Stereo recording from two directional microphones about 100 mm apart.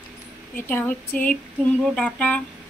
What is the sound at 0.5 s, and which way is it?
Speech, 15° left (ahead or behind).